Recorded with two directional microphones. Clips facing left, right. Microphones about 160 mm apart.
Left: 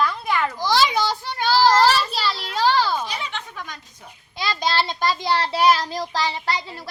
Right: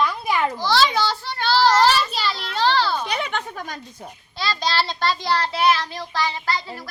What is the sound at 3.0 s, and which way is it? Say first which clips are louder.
Speech: right 5 dB; 60° right (ahead or behind).